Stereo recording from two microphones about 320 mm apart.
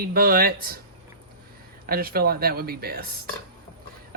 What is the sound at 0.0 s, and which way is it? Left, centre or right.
Speech, right.